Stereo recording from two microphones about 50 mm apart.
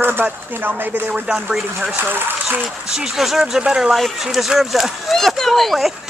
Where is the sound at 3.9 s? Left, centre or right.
Centre.